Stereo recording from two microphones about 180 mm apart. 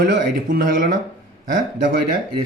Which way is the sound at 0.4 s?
50° right (ahead or behind).